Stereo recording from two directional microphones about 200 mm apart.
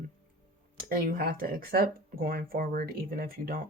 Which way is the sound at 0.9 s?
45° right (ahead or behind).